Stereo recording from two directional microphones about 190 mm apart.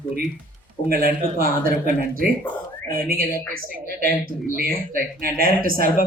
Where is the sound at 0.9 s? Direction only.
50° right (ahead or behind).